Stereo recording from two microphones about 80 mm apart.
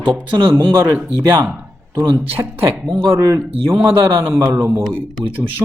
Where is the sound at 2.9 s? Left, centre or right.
Right.